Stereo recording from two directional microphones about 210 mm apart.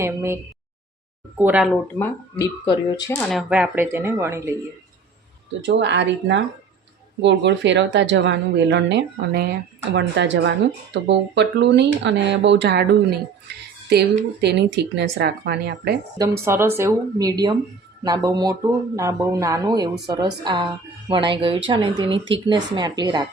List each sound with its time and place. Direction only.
0.0 s speech: 15° right (ahead or behind)
1.4 s speech: 5° right (ahead or behind)
2.3 s speech: 20° left (ahead or behind)
3.2 s speech: centre (ahead or behind)
5.6 s speech: 55° right (ahead or behind)
16.1 s speech: 15° right (ahead or behind)